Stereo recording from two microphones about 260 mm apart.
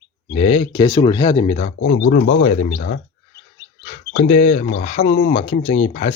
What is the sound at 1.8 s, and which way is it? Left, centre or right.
Speech, left.